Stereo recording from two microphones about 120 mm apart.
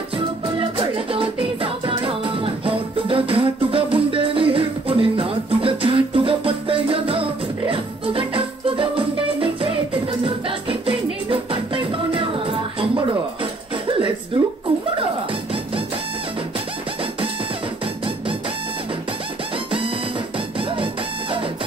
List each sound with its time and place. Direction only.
0.6 s music: 50° right (ahead or behind)
20.3 s music: 45° right (ahead or behind)